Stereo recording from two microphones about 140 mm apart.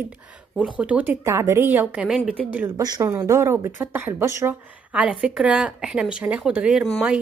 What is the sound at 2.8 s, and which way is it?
Speech, 30° right (ahead or behind).